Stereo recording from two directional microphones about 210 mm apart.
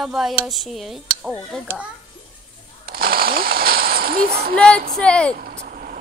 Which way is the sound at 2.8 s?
45° right (ahead or behind).